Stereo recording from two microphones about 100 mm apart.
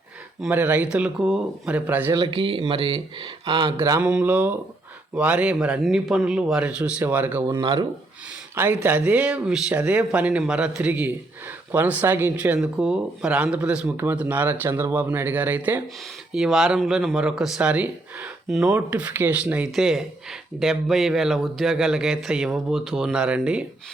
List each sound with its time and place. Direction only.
0.5 s speech: 15° right (ahead or behind)
2.3 s speech: 65° right (ahead or behind)
3.8 s mantra: 30° right (ahead or behind)
4.0 s speech: 15° right (ahead or behind)
7.6 s speech: 50° right (ahead or behind)
8.5 s speech: 20° right (ahead or behind)
12.5 s speech: 5° right (ahead or behind)
16.3 s speech: centre (ahead or behind)